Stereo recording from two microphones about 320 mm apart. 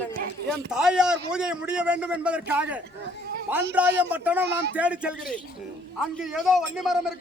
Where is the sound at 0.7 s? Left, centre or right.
Centre.